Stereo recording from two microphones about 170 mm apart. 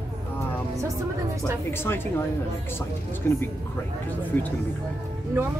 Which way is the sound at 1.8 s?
10° left (ahead or behind).